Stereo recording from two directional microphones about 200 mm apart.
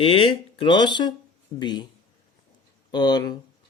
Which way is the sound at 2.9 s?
20° left (ahead or behind).